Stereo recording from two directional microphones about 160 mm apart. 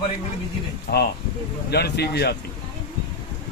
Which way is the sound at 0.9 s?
70° left (ahead or behind).